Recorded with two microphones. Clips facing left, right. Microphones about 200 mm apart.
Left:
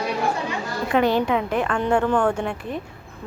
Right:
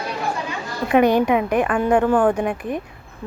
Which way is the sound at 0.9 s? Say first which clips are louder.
Right 4 dB; 15° right (ahead or behind).